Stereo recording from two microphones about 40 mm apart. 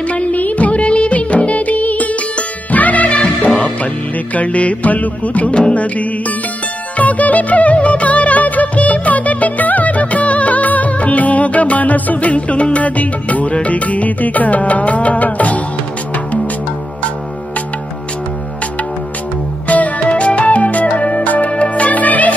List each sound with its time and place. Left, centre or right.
0.0 s music of bollywood: left
5.5 s music: left
19.7 s music: left